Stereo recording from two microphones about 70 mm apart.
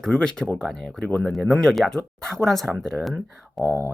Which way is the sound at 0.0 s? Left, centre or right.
Centre.